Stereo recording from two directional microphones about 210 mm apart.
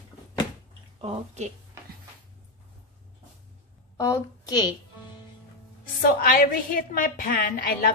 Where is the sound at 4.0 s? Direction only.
15° left (ahead or behind).